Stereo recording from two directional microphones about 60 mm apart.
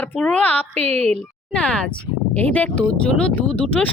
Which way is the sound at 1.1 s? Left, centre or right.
Centre.